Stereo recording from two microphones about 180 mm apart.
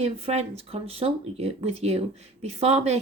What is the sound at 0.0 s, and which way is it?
Speech, 35° right (ahead or behind).